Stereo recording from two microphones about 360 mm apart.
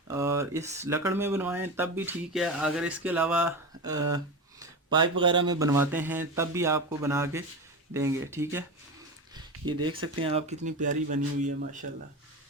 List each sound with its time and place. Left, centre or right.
0.1 s speech: centre